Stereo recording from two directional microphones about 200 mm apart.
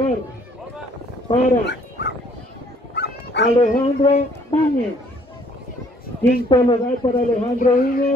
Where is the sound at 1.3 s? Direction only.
25° left (ahead or behind).